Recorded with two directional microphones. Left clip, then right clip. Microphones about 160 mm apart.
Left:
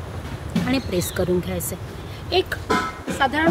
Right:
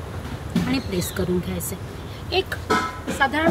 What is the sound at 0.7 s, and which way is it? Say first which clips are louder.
Speech: left 3 dB; 90° left.